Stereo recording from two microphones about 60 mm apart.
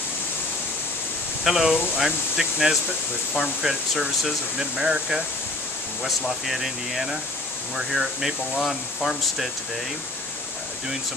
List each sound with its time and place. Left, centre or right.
1.4 s speech: centre